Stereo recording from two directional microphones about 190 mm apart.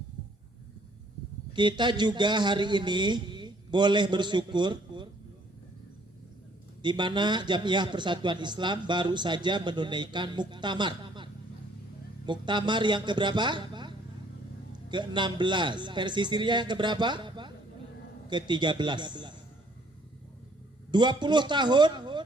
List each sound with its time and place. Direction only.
1.5 s a man's voice: 25° right (ahead or behind)
6.8 s a man's voice: 25° right (ahead or behind)
20.9 s a man's voice: 25° right (ahead or behind)